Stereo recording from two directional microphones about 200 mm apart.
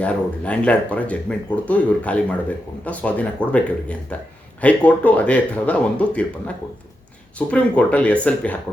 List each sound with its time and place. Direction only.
0.0 s speech: 5° left (ahead or behind)
7.3 s speech: 5° left (ahead or behind)